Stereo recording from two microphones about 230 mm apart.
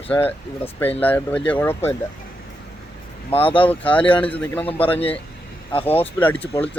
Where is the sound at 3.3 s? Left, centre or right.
Left.